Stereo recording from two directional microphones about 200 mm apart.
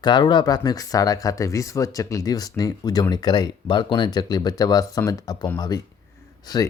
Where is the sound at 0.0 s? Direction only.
20° left (ahead or behind).